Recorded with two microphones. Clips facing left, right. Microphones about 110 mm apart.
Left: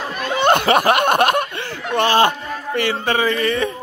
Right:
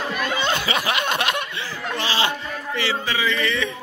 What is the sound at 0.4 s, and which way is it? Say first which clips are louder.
Snicker: left 14 dB; 55° left (ahead or behind).